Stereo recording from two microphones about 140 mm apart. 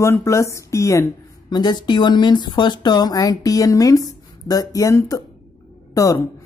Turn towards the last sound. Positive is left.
turn(degrees=25)  # may be behind; listen again after turning